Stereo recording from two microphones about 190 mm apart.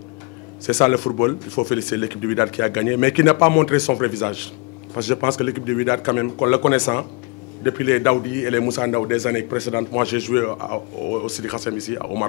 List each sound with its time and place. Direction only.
0.8 s a man's voice: 10° left (ahead or behind)
11.2 s a man's voice: 5° left (ahead or behind)